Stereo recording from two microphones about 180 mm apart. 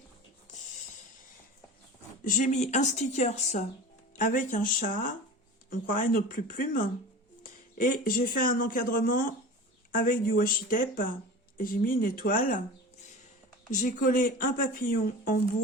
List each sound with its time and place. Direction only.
2.2 s speech: 45° left (ahead or behind)
13.7 s speech: 45° left (ahead or behind)